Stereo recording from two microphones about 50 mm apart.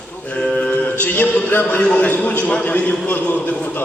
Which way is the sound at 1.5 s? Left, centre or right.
Left.